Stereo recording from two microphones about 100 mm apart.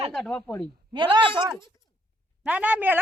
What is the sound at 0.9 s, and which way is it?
Speech, 55° right (ahead or behind).